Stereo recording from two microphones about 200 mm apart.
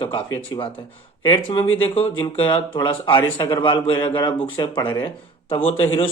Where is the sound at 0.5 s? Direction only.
20° left (ahead or behind).